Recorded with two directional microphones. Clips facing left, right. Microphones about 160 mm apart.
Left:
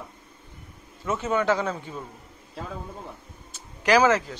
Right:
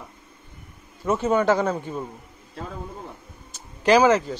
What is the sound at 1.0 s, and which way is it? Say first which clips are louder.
A man's voice: right 4 dB; 40° right (ahead or behind).